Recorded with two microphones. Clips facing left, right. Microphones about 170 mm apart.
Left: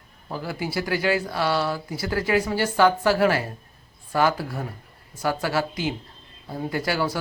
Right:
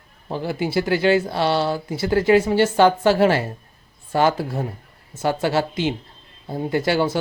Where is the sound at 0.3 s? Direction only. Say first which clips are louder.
Right 5 dB; 25° right (ahead or behind).